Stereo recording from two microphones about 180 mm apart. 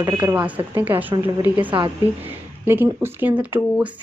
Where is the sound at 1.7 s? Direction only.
25° right (ahead or behind).